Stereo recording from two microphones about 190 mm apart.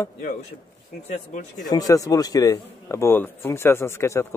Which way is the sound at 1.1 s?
40° left (ahead or behind).